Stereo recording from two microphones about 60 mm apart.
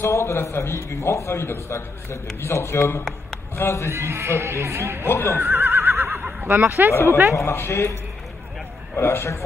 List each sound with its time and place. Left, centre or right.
0.0 s a man's voice: left
3.9 s speech: right
5.0 s a man's voice: left
5.4 s neigh: right
6.4 s speech: right
6.9 s a man's voice: left
9.0 s a man's voice: left